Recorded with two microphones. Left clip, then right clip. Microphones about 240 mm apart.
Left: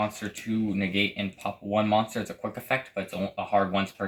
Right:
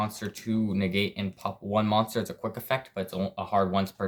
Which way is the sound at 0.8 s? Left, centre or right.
Right.